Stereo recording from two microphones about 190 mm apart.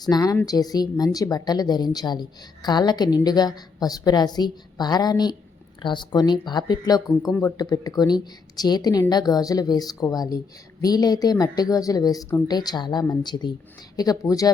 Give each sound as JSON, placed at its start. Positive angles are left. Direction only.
{"t": 0.0, "sound": "speech", "side_deg": 20}